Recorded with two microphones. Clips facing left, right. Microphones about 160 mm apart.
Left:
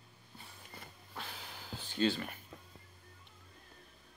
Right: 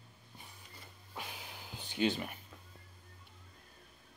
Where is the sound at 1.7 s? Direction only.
15° right (ahead or behind).